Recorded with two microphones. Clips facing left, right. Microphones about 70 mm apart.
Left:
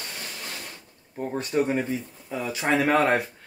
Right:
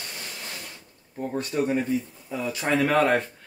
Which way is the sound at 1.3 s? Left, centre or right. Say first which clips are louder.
Left 1 dB; left.